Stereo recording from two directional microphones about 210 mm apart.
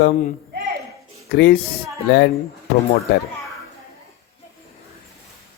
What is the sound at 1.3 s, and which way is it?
Speech, 50° left (ahead or behind).